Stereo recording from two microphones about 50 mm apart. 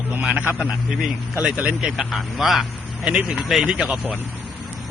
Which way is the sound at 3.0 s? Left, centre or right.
Right.